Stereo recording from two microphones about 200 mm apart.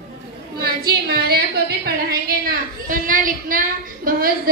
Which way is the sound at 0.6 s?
50° right (ahead or behind).